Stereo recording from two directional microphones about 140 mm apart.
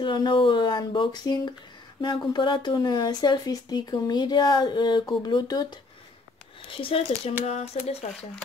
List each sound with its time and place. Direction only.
0.0 s speech: 35° left (ahead or behind)
6.8 s speech: 40° left (ahead or behind)